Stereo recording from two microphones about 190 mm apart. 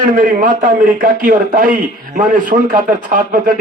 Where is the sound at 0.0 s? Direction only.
45° right (ahead or behind).